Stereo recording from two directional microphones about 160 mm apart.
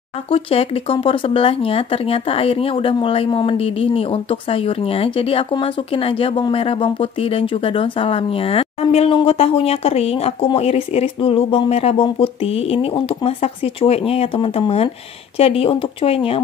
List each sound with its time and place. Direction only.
0.3 s speech: 35° left (ahead or behind)